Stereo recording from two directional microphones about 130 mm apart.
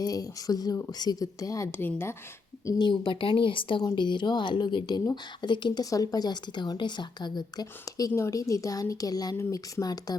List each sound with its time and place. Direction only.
0.0 s speech: 30° left (ahead or behind)
2.6 s speech: 35° left (ahead or behind)